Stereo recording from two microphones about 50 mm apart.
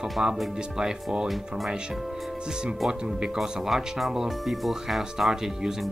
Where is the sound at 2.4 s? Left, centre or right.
Centre.